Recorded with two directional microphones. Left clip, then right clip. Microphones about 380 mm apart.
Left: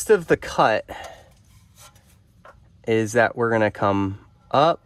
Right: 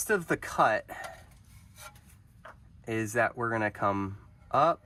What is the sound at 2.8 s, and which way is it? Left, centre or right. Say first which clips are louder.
Speech: left 10 dB; left.